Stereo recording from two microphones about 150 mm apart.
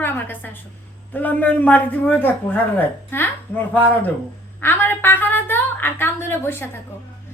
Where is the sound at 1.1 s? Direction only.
10° left (ahead or behind).